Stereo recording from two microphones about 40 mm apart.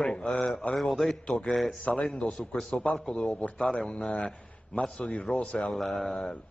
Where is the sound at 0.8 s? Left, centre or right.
Centre.